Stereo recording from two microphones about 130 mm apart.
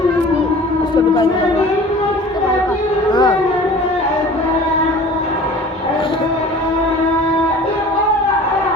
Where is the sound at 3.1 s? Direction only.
35° left (ahead or behind).